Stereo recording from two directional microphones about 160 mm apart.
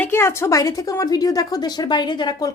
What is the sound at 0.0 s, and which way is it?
A woman's voice, 15° left (ahead or behind).